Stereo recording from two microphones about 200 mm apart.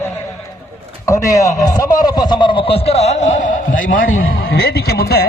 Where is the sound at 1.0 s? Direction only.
15° left (ahead or behind); by 5.3 s 50° left (ahead or behind).